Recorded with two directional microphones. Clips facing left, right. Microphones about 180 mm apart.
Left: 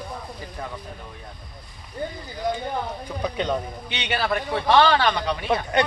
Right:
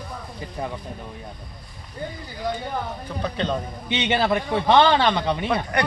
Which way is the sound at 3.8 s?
20° right (ahead or behind).